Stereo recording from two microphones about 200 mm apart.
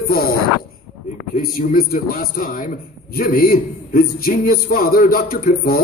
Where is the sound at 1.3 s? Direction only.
40° left (ahead or behind).